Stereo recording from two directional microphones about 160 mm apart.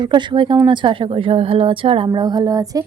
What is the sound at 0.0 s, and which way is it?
A woman's voice, 30° right (ahead or behind).